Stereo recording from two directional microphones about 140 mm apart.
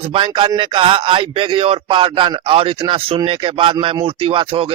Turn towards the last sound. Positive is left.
turn(degrees=-40)  # may be behind; listen again after turning